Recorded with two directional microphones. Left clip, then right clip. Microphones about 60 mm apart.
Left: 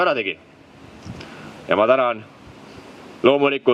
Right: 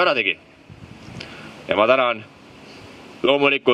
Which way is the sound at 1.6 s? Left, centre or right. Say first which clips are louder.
Even; right.